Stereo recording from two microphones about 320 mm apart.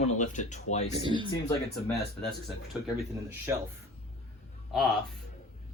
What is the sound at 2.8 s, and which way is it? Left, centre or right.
Speech, centre.